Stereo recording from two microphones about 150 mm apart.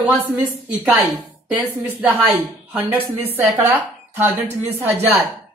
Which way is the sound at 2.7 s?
15° right (ahead or behind).